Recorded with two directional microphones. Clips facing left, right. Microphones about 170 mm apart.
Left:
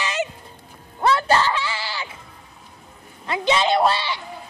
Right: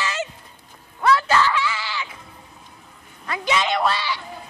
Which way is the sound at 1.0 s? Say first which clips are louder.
Even; 30° left (ahead or behind).